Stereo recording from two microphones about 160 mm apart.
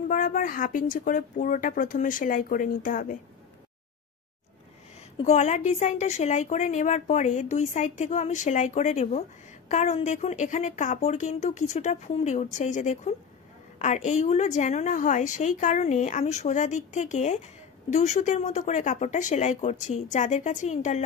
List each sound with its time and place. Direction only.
0.1 s speech: 55° left (ahead or behind)
5.1 s a woman's voice: 45° left (ahead or behind)